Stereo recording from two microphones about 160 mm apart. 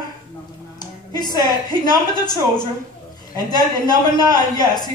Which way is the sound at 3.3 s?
25° left (ahead or behind).